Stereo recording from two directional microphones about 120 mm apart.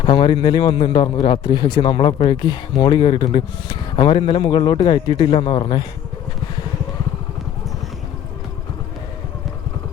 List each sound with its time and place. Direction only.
0.0 s a man's voice: 45° left (ahead or behind)